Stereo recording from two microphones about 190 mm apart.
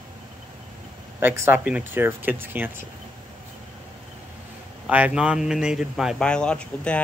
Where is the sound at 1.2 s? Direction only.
10° right (ahead or behind).